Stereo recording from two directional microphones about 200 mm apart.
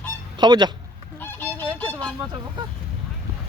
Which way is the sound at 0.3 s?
20° right (ahead or behind).